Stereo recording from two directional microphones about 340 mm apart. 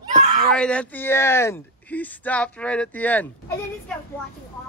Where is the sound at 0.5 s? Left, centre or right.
Centre.